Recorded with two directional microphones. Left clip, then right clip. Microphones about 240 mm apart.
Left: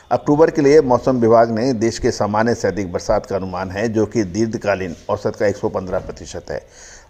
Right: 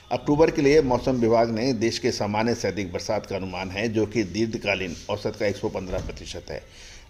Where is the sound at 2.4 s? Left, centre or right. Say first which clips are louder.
Left 7 dB; centre.